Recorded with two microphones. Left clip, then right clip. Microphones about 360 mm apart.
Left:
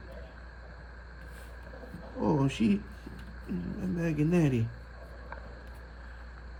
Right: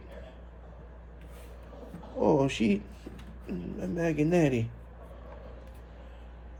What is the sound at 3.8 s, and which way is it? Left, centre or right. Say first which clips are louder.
Speech: right 4 dB; centre.